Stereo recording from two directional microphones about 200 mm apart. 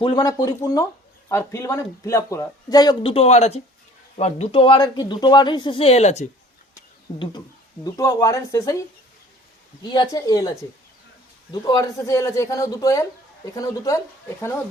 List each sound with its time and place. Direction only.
0.0 s a man's voice: 20° left (ahead or behind)
7.1 s a man's voice: 25° left (ahead or behind)
9.8 s a man's voice: 20° left (ahead or behind)